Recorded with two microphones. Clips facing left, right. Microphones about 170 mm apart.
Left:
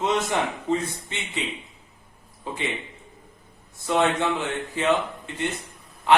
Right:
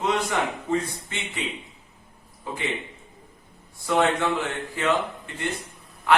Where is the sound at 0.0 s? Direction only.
20° left (ahead or behind).